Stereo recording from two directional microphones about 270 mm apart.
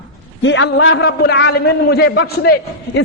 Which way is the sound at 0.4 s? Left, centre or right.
Left.